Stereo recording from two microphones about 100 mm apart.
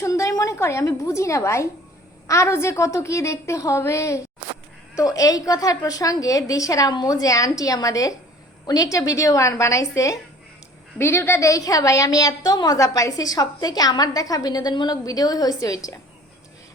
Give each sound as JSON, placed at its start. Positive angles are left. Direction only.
{"t": 0.0, "sound": "a woman's voice", "side_deg": 30}